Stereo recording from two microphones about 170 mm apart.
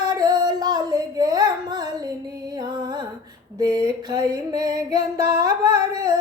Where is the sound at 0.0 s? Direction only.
25° right (ahead or behind).